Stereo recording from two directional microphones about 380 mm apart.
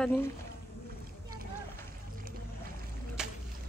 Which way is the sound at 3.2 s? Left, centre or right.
Centre.